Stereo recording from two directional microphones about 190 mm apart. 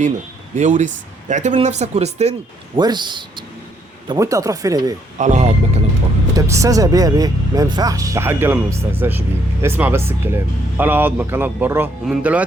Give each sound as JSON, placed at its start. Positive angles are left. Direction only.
{"t": 0.5, "sound": "speech", "side_deg": -40}
{"t": 2.7, "sound": "speech", "side_deg": -25}
{"t": 5.1, "sound": "speech", "side_deg": -40}
{"t": 6.3, "sound": "speech", "side_deg": -15}